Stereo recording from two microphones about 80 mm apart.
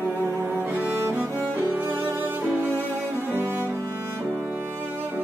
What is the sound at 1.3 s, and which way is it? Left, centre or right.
Cello, left.